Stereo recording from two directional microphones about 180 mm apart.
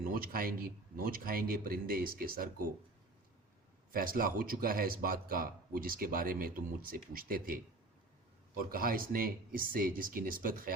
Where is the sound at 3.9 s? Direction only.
50° right (ahead or behind).